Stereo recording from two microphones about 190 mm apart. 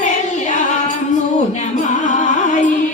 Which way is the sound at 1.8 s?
40° left (ahead or behind).